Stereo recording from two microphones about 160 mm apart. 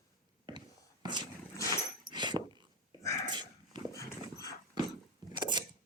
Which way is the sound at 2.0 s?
30° right (ahead or behind).